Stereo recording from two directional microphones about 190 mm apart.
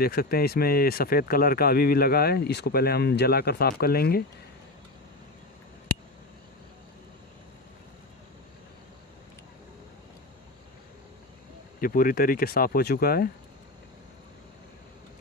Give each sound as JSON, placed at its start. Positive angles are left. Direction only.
{"t": 0.0, "sound": "speech", "side_deg": 55}
{"t": 11.8, "sound": "speech", "side_deg": 50}